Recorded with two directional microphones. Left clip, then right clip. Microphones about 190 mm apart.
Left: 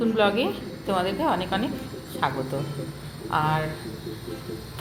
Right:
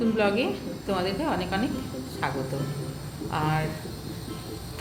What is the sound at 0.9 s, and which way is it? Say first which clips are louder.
A woman's voice: left 4 dB; 10° left (ahead or behind).